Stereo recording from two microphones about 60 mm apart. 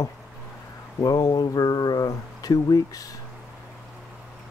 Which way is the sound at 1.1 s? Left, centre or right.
Left.